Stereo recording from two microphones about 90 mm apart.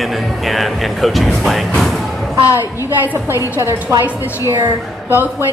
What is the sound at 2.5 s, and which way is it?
Speech, 35° left (ahead or behind).